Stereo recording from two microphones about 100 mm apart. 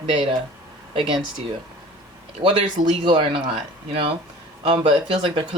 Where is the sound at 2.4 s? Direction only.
60° right (ahead or behind).